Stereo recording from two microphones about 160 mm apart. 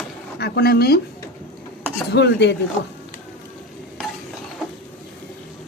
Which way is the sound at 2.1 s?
90° left.